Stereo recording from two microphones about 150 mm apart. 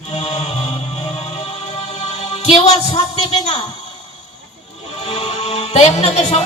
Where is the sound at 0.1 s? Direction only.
45° left (ahead or behind).